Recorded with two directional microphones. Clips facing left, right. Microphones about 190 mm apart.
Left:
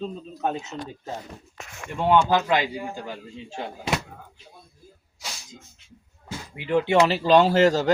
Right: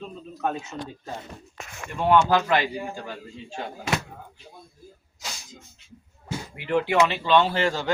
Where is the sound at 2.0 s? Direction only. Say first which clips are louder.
Even; 15° left (ahead or behind).